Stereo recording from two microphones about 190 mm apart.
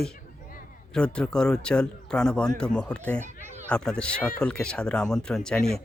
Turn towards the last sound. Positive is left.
turn(degrees=5)  # may be behind; listen again after turning